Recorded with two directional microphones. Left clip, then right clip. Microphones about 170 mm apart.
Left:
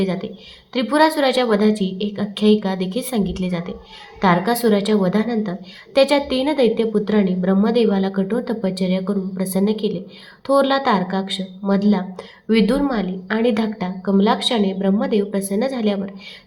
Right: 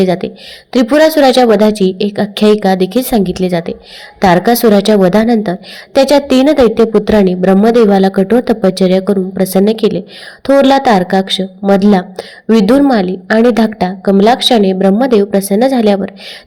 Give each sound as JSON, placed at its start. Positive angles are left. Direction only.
{"t": 0.0, "sound": "a woman's voice", "side_deg": -40}